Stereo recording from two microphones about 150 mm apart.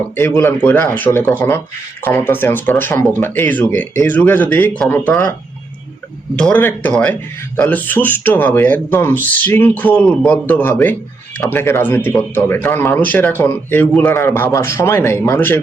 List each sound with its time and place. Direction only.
0.2 s speech: 15° left (ahead or behind)
6.3 s speech: 10° left (ahead or behind)